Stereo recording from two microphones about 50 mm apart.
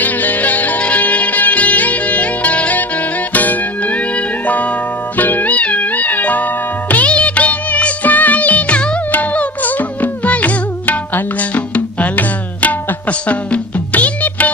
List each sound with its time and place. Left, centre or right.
0.0 s music: left